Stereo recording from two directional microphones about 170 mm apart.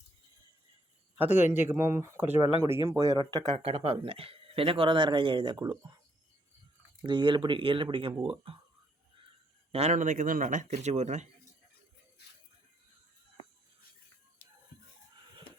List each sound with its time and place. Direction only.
1.5 s speech: 15° right (ahead or behind)
7.0 s speech: 25° right (ahead or behind)
9.7 s speech: 45° right (ahead or behind)